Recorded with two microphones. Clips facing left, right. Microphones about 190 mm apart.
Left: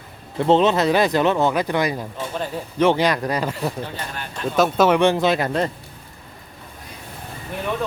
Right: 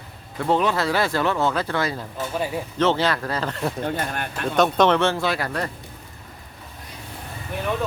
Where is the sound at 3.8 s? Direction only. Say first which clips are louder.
Right 5 dB; 55° right (ahead or behind).